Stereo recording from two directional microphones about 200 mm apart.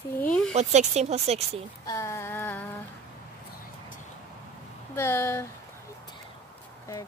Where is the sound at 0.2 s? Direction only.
5° left (ahead or behind).